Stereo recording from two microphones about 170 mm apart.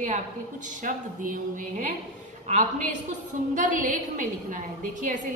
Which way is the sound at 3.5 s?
50° right (ahead or behind).